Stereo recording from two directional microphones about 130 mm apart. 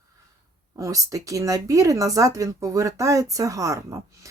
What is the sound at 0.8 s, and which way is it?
Speech, 25° right (ahead or behind).